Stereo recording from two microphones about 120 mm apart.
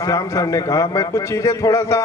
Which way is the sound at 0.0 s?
25° left (ahead or behind).